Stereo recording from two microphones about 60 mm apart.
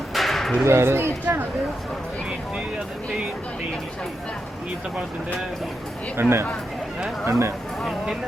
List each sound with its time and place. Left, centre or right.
0.1 s a sound: centre
0.6 s speech: right
6.1 s speech: right